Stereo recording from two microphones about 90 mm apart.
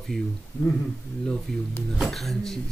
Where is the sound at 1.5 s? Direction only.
Centre (ahead or behind).